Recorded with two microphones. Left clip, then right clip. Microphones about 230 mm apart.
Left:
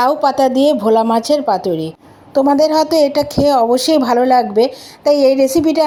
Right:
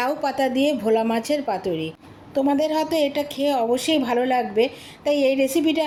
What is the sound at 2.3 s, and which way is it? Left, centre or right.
A woman's voice, left.